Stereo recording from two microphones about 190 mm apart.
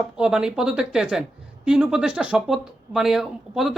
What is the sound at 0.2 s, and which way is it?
Speech, 5° right (ahead or behind).